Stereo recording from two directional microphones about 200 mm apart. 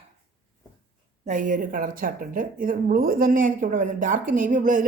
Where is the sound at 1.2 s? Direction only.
40° right (ahead or behind).